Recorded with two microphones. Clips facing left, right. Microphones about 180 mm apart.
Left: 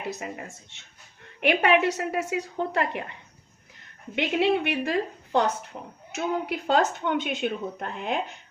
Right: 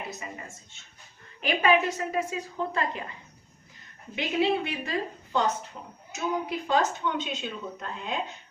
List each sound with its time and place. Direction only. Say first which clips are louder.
0.2 s a woman's voice: left 4 dB; 65° left (ahead or behind)
5.7 s speech: left 4 dB; 40° left (ahead or behind)
6.1 s speech: left 2 dB; 70° left (ahead or behind)